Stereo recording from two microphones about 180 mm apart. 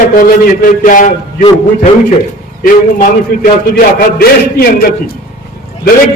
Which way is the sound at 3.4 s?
55° left (ahead or behind).